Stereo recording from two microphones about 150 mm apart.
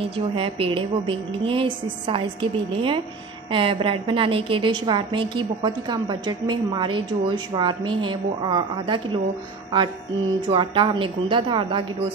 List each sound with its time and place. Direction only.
0.0 s a woman's voice: 40° right (ahead or behind)
10.5 s a woman's voice: 35° right (ahead or behind)